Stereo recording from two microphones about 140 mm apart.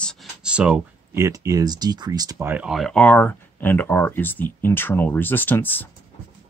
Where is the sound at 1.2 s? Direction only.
20° right (ahead or behind).